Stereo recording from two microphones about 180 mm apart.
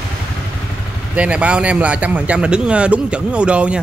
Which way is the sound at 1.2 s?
5° right (ahead or behind).